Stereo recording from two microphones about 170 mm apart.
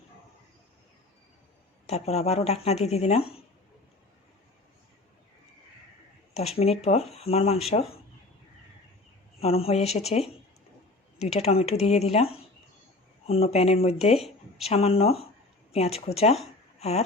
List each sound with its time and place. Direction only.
1.9 s speech: 40° left (ahead or behind)
6.3 s speech: 35° left (ahead or behind)
9.4 s speech: 35° left (ahead or behind)
11.2 s speech: 40° left (ahead or behind)